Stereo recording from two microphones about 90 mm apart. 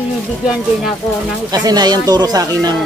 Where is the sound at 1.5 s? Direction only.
45° right (ahead or behind).